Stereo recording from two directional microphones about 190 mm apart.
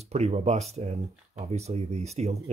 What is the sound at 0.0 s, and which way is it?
Speech, 35° right (ahead or behind).